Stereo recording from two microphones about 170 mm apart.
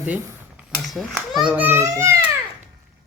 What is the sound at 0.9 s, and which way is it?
A child's voice, centre (ahead or behind).